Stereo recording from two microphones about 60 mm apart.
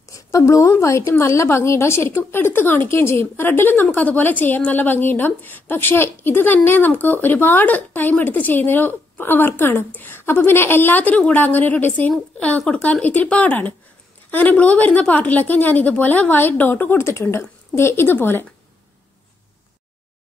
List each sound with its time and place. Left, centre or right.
0.1 s a woman's voice: left
17.0 s a woman's voice: left